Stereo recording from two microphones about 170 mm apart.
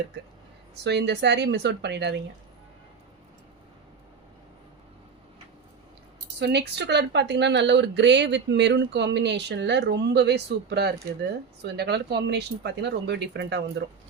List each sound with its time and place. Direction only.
0.9 s speech: 90° right
6.4 s speech: 80° right